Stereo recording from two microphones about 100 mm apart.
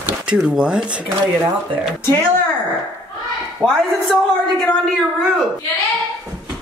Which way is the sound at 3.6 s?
15° right (ahead or behind).